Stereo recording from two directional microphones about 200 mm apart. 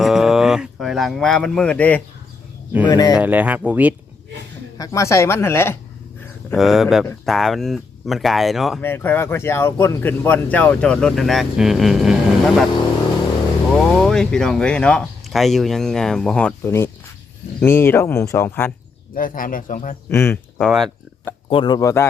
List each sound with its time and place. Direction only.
0.0 s a sound: centre (ahead or behind)
2.8 s speech: 20° left (ahead or behind)
3.2 s speech: 10° right (ahead or behind)
4.8 s speech: 15° left (ahead or behind)
6.5 s speech: centre (ahead or behind)
8.8 s speech: 10° left (ahead or behind)
13.9 s speech: centre (ahead or behind)
19.1 s a man's voice: 45° left (ahead or behind)
20.1 s speech: 10° left (ahead or behind)
20.6 s speech: centre (ahead or behind)
21.5 s speech: 20° left (ahead or behind)